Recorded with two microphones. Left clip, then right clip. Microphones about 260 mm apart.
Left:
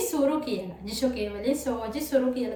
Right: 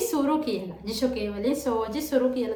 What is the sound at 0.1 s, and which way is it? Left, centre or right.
A woman's voice, centre.